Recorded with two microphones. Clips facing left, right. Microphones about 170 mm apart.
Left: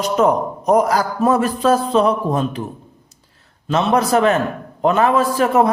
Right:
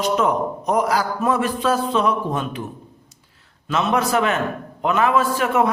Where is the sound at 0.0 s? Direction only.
40° left (ahead or behind).